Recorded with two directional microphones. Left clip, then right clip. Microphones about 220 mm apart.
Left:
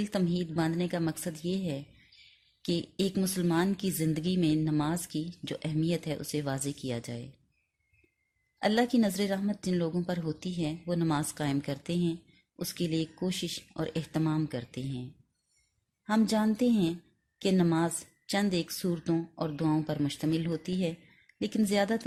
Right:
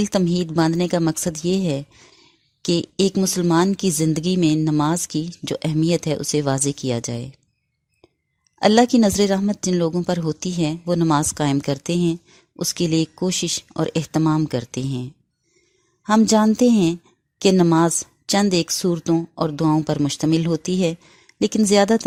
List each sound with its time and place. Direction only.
0.0 s a woman's voice: 45° right (ahead or behind)
8.5 s a woman's voice: 45° right (ahead or behind)
16.0 s a woman's voice: 45° right (ahead or behind)